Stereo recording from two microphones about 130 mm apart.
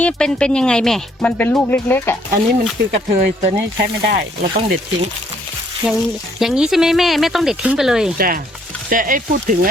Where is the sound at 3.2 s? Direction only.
90° right.